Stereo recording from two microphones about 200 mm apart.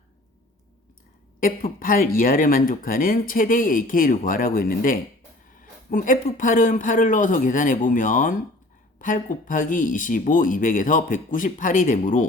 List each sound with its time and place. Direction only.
1.4 s speech: 45° left (ahead or behind)